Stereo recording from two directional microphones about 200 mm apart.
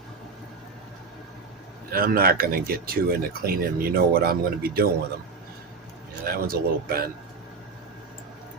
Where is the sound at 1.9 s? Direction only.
50° right (ahead or behind).